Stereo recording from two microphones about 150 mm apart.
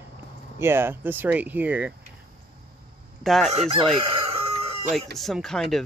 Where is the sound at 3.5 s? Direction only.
45° right (ahead or behind).